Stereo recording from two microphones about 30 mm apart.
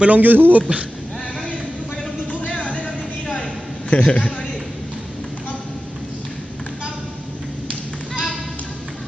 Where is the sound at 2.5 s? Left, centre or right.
Left.